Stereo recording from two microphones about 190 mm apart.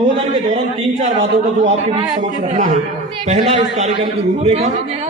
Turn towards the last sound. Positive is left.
turn(degrees=-35)  # may be behind; listen again after turning